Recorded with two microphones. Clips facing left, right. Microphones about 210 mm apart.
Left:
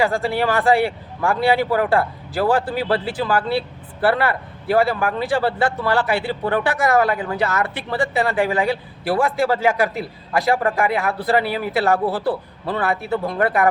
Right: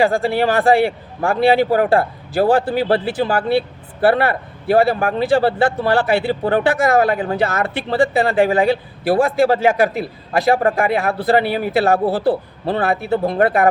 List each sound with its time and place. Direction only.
0.0 s speech: 25° right (ahead or behind)